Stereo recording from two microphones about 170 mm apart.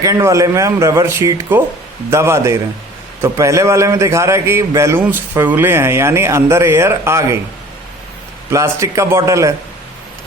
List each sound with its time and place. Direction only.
0.0 s a man's voice: 20° right (ahead or behind)
8.4 s a man's voice: 15° right (ahead or behind)